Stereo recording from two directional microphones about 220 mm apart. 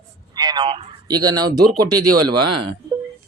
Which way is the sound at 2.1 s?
90° right.